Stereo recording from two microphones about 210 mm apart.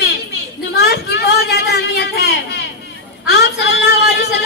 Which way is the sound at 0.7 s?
50° left (ahead or behind).